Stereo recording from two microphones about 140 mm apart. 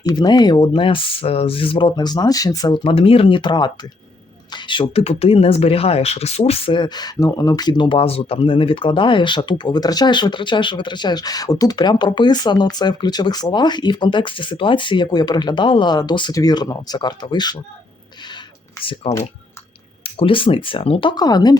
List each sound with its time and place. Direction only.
0.0 s speech: 30° left (ahead or behind)
2.8 s speech: 40° left (ahead or behind)
20.1 s speech: 40° left (ahead or behind)